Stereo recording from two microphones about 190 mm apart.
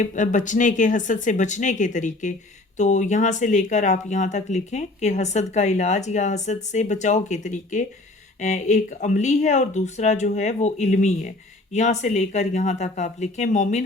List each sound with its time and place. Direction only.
0.0 s speech: 40° left (ahead or behind)